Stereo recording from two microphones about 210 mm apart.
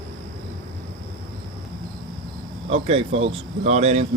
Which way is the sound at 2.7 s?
25° right (ahead or behind).